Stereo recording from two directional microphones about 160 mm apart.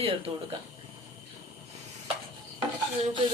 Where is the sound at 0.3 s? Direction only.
35° right (ahead or behind).